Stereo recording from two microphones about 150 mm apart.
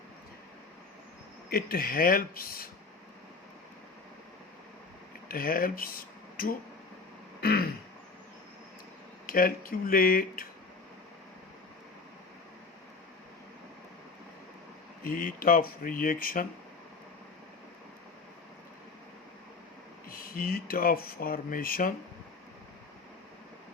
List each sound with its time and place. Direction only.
1.5 s speech: 85° left
5.3 s speech: 70° left (ahead or behind)
7.4 s throat clearing: 90° left
9.2 s speech: 70° left (ahead or behind)
15.0 s speech: 70° left (ahead or behind)
20.1 s speech: 75° left (ahead or behind)